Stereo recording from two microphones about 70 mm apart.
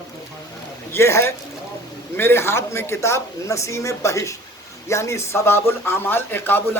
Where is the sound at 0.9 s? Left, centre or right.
Left.